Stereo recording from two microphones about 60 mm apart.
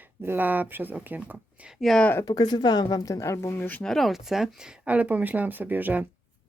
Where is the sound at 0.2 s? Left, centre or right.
Right.